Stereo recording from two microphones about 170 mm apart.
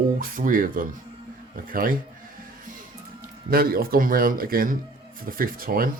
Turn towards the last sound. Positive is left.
turn(degrees=-55)  # may be behind; listen again after turning